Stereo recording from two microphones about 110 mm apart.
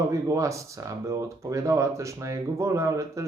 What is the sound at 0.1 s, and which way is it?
Speech, 30° right (ahead or behind).